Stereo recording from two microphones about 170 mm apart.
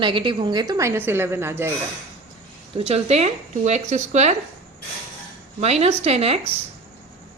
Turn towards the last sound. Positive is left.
turn(degrees=-35)  # may be behind; listen again after turning